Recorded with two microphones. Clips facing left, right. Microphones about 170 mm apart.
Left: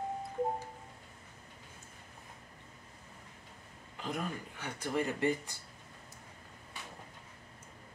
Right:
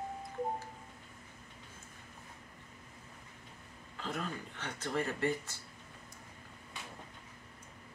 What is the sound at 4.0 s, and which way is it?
Speech, 15° left (ahead or behind).